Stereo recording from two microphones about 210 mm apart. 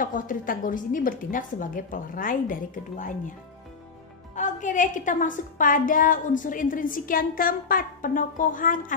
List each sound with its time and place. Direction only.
0.0 s a woman's voice: 40° left (ahead or behind)
4.4 s a woman's voice: 35° left (ahead or behind)